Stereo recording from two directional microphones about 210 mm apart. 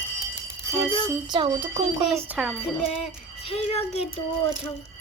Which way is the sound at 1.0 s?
20° right (ahead or behind).